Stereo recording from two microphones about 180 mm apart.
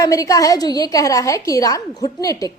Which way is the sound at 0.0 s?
20° left (ahead or behind).